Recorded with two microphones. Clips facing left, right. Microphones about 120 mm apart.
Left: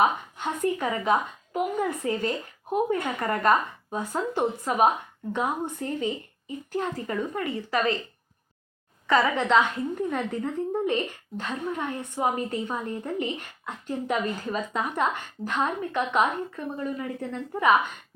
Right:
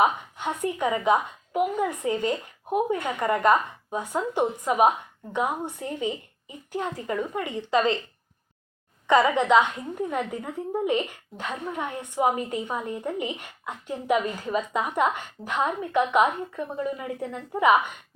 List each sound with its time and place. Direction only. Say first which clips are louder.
0.0 s a woman's voice: right 1 dB; 15° right (ahead or behind)
9.0 s a woman's voice: right 3 dB; 20° right (ahead or behind)